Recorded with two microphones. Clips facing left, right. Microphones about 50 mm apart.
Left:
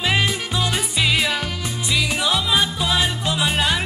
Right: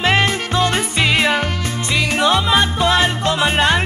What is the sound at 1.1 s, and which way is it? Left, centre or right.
Music, right.